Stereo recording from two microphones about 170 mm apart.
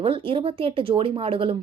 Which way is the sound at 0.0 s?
35° right (ahead or behind).